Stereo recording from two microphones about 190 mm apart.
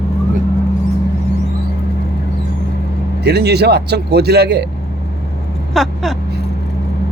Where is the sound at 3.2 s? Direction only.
60° right (ahead or behind).